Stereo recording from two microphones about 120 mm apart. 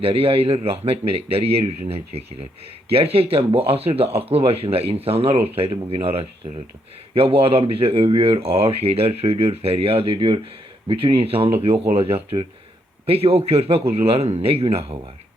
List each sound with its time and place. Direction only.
0.0 s speech: 50° right (ahead or behind)